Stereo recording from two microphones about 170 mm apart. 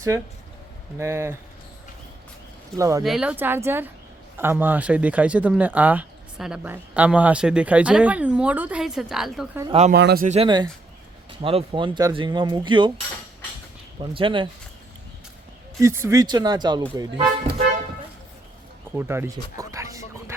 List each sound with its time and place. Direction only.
0.1 s speech: 20° right (ahead or behind)
2.7 s speech: 20° right (ahead or behind)
3.0 s speech: 5° right (ahead or behind)
9.9 s speech: 70° right (ahead or behind)
10.2 s speech: 40° right (ahead or behind)
14.0 s speech: 30° right (ahead or behind)
15.8 s speech: 15° right (ahead or behind)
18.9 s speech: 15° right (ahead or behind)